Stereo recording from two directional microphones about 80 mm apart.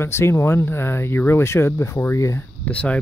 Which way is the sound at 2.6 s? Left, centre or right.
Centre.